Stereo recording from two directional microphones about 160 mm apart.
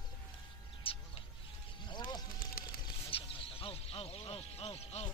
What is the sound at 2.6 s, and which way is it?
Bird, 65° left (ahead or behind).